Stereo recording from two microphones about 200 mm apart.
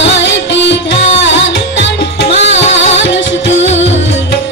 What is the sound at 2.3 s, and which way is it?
Music, 30° left (ahead or behind).